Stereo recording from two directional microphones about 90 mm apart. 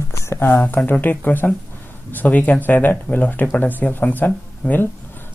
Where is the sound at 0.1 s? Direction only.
30° left (ahead or behind).